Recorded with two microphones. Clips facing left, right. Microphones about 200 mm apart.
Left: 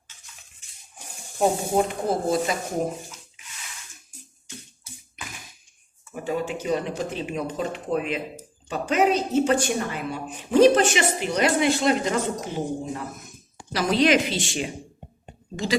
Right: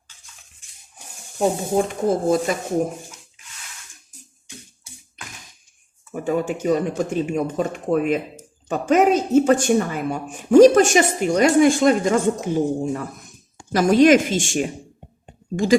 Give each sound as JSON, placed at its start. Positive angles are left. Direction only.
{"t": 1.7, "sound": "speech", "side_deg": -50}
{"t": 6.1, "sound": "speech", "side_deg": -50}